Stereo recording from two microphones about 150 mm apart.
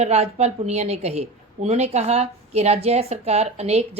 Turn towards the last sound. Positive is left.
turn(degrees=-45)  # may be behind; listen again after turning